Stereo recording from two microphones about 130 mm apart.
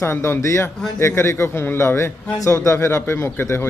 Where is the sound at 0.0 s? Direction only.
20° left (ahead or behind).